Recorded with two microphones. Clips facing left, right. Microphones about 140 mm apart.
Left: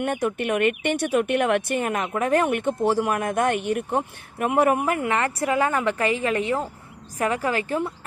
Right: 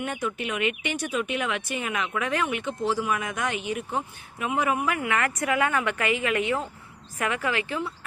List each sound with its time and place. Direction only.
0.0 s speech: 55° left (ahead or behind)